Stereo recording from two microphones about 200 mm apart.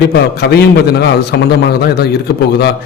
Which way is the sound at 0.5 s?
55° left (ahead or behind).